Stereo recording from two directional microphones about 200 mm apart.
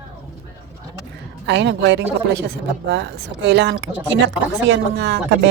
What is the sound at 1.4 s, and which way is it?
Speech, 60° right (ahead or behind).